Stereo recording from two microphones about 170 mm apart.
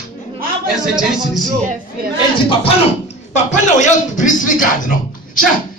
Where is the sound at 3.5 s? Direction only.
45° left (ahead or behind).